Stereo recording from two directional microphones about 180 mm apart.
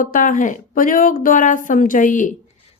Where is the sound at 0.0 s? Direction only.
50° left (ahead or behind).